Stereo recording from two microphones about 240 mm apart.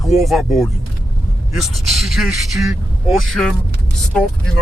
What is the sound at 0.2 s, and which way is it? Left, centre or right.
Speech, centre.